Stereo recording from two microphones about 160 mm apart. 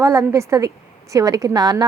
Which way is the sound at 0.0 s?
20° right (ahead or behind).